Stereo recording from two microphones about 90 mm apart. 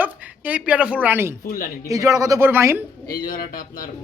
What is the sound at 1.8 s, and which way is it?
Speech, 40° right (ahead or behind).